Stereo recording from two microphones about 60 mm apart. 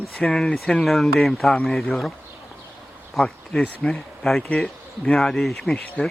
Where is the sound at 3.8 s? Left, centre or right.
Centre.